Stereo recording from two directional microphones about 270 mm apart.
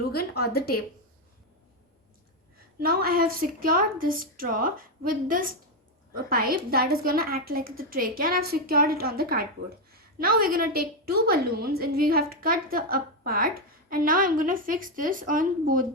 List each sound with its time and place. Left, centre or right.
0.1 s a woman's voice: left
2.8 s a woman's voice: right